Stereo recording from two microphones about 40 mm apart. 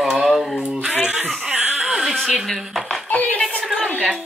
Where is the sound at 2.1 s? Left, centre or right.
Centre.